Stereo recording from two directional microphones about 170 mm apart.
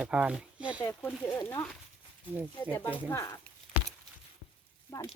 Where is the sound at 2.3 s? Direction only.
10° right (ahead or behind).